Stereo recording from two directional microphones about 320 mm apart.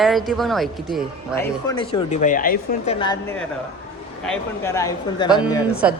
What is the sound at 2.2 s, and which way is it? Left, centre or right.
Speech, left.